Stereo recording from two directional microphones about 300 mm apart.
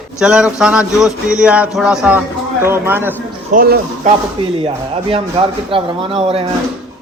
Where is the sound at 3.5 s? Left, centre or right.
Right.